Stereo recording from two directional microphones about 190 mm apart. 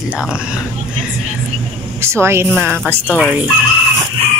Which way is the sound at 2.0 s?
15° right (ahead or behind).